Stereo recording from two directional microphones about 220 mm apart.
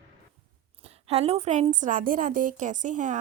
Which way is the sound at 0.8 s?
30° right (ahead or behind).